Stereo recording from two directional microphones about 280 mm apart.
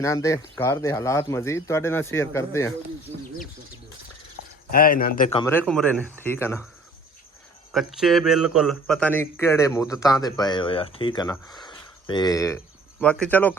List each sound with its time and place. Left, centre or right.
0.0 s speech: centre
4.7 s speech: left
5.4 s speech: centre
7.7 s speech: centre